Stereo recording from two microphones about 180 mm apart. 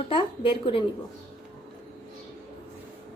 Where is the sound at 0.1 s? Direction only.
30° left (ahead or behind).